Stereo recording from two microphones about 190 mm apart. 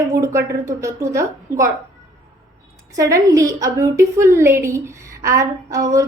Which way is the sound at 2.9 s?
15° right (ahead or behind).